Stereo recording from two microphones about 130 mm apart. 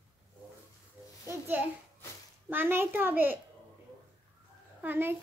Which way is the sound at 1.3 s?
15° right (ahead or behind).